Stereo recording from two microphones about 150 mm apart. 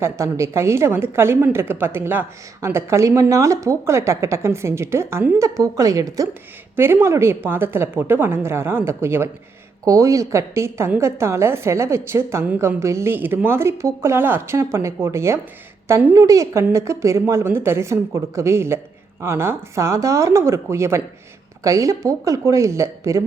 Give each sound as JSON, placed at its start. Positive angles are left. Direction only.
{"t": 0.0, "sound": "a woman's voice", "side_deg": -20}